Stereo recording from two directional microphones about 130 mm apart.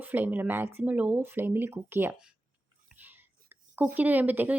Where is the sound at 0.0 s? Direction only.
15° right (ahead or behind).